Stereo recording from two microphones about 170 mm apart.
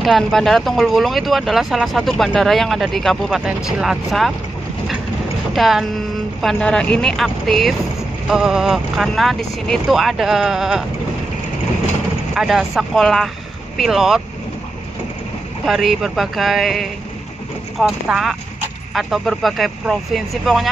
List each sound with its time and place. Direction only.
0.0 s speech: centre (ahead or behind)
5.5 s speech: centre (ahead or behind)
12.4 s speech: centre (ahead or behind)
15.6 s speech: centre (ahead or behind)